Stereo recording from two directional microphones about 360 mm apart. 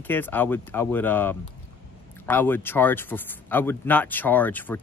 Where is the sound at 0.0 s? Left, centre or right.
Centre.